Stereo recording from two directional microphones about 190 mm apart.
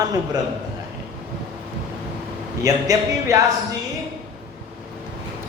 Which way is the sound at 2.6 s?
20° right (ahead or behind).